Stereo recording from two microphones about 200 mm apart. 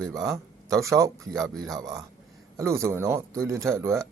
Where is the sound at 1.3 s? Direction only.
Centre (ahead or behind).